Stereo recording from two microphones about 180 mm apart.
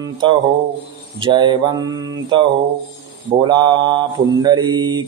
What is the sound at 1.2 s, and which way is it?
Mantra, 25° right (ahead or behind).